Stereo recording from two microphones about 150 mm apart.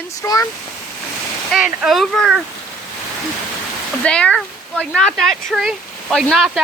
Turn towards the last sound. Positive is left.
turn(degrees=0)  # may be behind; listen again after turning